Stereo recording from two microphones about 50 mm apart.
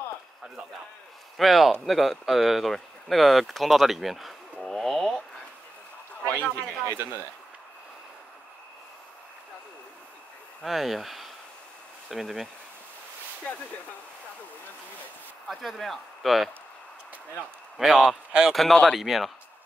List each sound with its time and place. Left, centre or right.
1.4 s speech: centre
4.6 s a sound: centre
6.2 s a sound: left
10.6 s speech: centre
15.4 s speech: centre
17.7 s speech: centre